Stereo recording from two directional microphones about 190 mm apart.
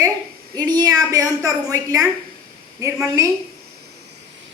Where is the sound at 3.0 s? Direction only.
15° right (ahead or behind).